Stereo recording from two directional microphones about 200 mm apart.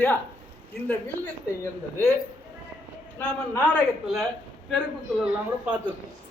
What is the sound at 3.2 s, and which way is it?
A man's voice, 10° left (ahead or behind).